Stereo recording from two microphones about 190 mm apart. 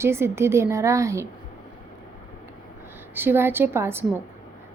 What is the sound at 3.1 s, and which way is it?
Speech, 10° right (ahead or behind).